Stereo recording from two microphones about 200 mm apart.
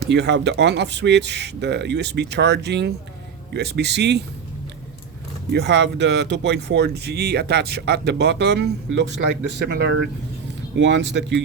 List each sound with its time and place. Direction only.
0.0 s speech: 60° right (ahead or behind)
5.5 s speech: 60° right (ahead or behind)